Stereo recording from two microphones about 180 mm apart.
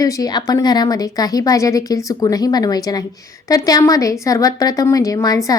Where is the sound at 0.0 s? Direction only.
20° left (ahead or behind).